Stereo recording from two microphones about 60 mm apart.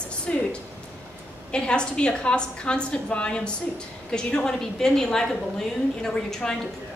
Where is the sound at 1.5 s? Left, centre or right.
Centre.